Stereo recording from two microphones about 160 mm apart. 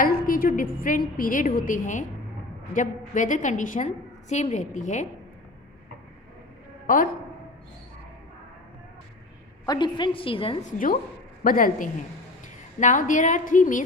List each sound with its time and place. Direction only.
0.0 s a woman's voice: 65° left (ahead or behind)
6.8 s a woman's voice: 60° left (ahead or behind)
9.6 s a woman's voice: 30° left (ahead or behind)
10.6 s a woman's voice: 55° left (ahead or behind)